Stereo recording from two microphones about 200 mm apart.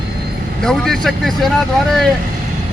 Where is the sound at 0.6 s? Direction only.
Centre (ahead or behind).